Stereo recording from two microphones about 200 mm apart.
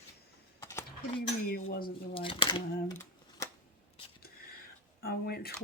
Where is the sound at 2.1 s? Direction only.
25° left (ahead or behind).